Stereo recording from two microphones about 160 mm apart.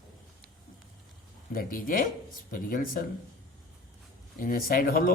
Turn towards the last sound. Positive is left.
turn(degrees=65)  # may be behind; listen again after turning